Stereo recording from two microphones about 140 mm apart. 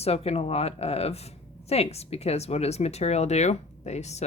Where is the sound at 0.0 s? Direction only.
45° left (ahead or behind).